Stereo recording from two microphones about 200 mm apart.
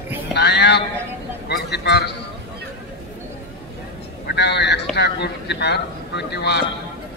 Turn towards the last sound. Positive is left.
turn(degrees=55)  # may be behind; listen again after turning